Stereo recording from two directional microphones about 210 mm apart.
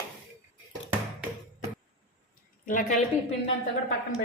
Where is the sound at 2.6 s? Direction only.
40° left (ahead or behind).